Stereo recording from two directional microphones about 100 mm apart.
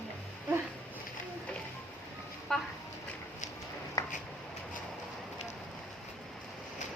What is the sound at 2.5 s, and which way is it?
Speech, 5° left (ahead or behind).